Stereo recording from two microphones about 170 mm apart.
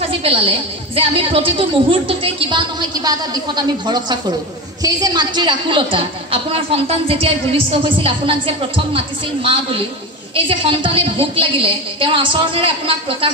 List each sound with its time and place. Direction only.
0.2 s a woman's voice: 35° right (ahead or behind)